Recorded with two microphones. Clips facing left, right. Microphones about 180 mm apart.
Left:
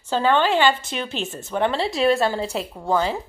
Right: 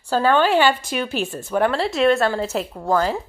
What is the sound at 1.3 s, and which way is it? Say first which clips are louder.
A woman's voice: right 1 dB; centre (ahead or behind).